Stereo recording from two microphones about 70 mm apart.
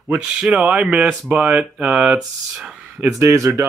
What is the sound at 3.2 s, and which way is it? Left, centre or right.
Speech, right.